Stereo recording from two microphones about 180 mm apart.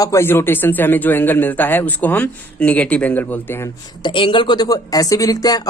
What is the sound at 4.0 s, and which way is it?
Speech, 25° left (ahead or behind).